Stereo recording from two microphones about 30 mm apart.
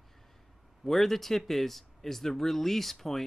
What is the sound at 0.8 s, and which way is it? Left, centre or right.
Speech, centre.